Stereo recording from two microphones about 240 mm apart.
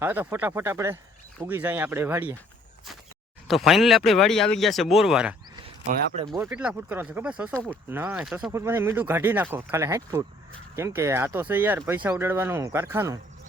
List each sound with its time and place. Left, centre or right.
0.0 s speech: centre
3.4 s speech: centre
5.8 s speech: right
6.4 s speech: centre